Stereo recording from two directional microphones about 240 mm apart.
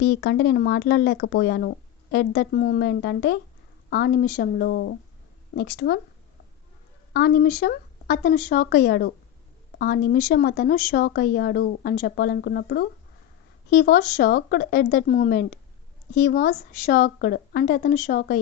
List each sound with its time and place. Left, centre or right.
0.0 s speech: left
7.1 s speech: left